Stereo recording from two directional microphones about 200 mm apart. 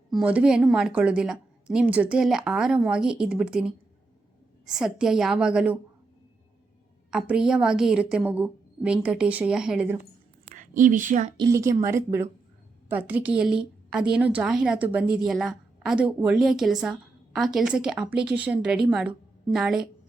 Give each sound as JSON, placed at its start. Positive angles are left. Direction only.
{"t": 0.1, "sound": "a woman's voice", "side_deg": -5}
{"t": 7.1, "sound": "a woman's voice", "side_deg": -5}
{"t": 10.5, "sound": "a woman's voice", "side_deg": -40}
{"t": 11.3, "sound": "a woman's voice", "side_deg": -15}